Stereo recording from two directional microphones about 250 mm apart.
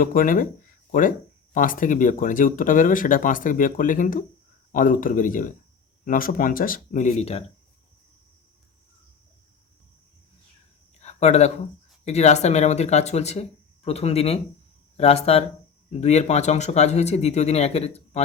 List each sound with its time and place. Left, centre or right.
0.0 s speech: left
11.0 s speech: left